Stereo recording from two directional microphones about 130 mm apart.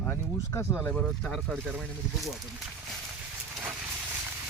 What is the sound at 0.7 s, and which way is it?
Speech, 10° left (ahead or behind).